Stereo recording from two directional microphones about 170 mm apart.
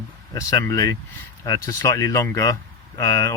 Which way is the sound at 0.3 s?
20° left (ahead or behind).